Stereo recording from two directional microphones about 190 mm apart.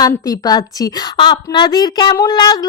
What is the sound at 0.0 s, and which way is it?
A woman's voice, 20° left (ahead or behind).